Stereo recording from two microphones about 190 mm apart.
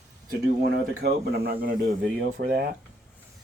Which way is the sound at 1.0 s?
55° right (ahead or behind).